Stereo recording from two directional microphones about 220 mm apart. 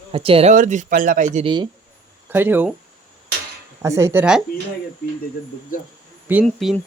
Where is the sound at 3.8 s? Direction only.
15° right (ahead or behind).